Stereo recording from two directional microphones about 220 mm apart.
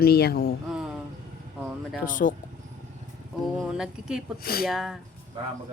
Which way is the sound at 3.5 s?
5° right (ahead or behind).